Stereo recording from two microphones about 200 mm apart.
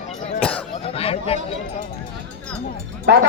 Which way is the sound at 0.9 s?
30° left (ahead or behind).